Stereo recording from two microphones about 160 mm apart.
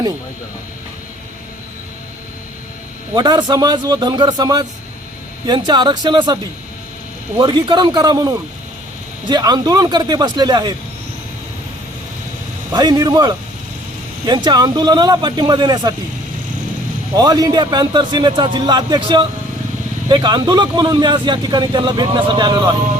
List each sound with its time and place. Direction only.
3.2 s speech: 25° right (ahead or behind)
12.7 s speech: 25° right (ahead or behind)
17.2 s speech: 25° right (ahead or behind)